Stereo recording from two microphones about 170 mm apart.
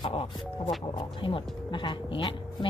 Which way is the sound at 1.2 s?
30° left (ahead or behind).